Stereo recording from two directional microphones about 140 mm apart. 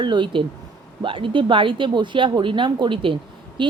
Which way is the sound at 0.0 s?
35° right (ahead or behind).